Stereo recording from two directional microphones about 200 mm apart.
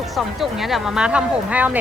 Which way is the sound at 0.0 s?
Centre (ahead or behind).